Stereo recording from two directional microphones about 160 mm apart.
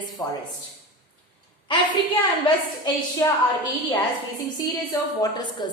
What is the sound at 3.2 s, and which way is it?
Speech, 20° left (ahead or behind).